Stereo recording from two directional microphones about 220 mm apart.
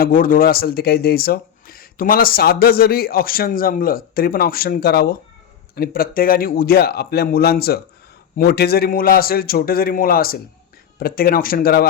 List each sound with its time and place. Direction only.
0.0 s speech: 40° left (ahead or behind)